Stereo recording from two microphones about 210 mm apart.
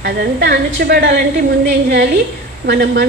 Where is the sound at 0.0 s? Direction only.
50° right (ahead or behind).